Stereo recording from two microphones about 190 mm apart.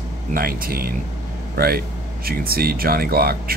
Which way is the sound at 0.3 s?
50° right (ahead or behind).